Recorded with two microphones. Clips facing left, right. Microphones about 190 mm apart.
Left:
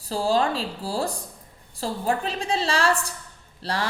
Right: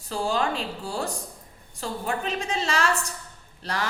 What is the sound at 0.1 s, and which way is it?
A woman's voice, 35° left (ahead or behind).